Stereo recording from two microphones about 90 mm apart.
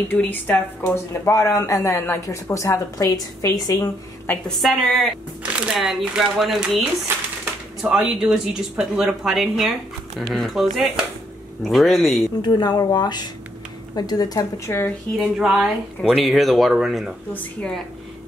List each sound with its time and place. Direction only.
0.1 s speech: 20° left (ahead or behind)
1.3 s a woman's voice: 35° left (ahead or behind)
4.6 s speech: centre (ahead or behind)
7.1 s speech: 25° right (ahead or behind)
7.8 s speech: 10° right (ahead or behind)
12.4 s speech: 50° left (ahead or behind)
14.7 s speech: 30° left (ahead or behind)
15.1 s speech: 5° right (ahead or behind)
17.3 s speech: 20° left (ahead or behind)